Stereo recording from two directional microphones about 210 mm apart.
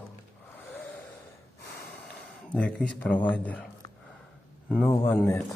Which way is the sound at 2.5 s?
5° left (ahead or behind).